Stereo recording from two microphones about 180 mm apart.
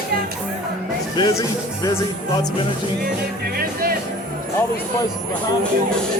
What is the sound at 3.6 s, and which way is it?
Speech, 55° right (ahead or behind).